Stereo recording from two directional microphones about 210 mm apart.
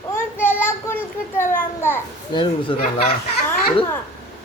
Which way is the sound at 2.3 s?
20° left (ahead or behind).